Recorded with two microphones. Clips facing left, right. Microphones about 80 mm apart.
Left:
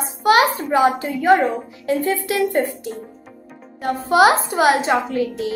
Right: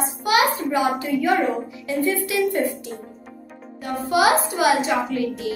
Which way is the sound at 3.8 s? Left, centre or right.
Left.